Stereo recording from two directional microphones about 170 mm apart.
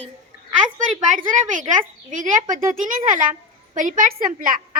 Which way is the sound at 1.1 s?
50° right (ahead or behind).